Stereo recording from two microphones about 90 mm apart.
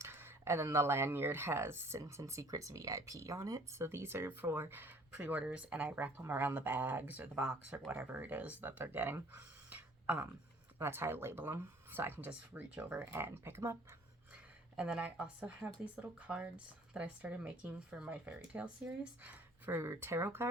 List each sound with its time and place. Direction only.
0.0 s speech: 25° right (ahead or behind)
10.8 s speech: 25° right (ahead or behind)
14.8 s speech: 15° right (ahead or behind)